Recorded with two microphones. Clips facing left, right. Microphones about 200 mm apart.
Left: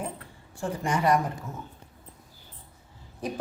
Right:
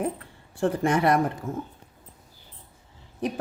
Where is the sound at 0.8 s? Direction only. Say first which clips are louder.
Right 2 dB; 55° right (ahead or behind).